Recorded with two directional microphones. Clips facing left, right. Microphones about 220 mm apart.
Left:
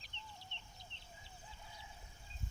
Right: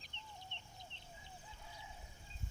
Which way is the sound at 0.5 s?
50° right (ahead or behind).